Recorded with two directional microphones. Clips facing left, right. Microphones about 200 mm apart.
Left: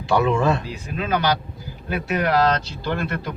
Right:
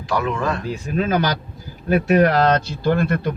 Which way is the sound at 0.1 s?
25° left (ahead or behind).